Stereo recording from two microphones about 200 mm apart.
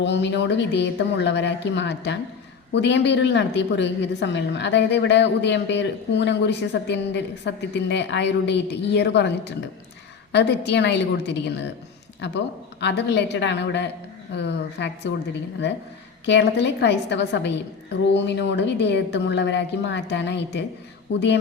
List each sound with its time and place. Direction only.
0.0 s a woman's voice: 60° left (ahead or behind)